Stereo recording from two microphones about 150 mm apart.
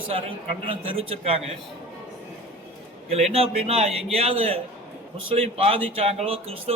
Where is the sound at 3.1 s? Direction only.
45° right (ahead or behind).